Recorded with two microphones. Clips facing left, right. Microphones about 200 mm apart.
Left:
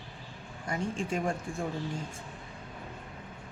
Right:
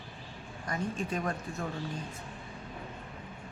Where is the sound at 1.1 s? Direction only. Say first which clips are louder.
Left 2 dB; 25° left (ahead or behind).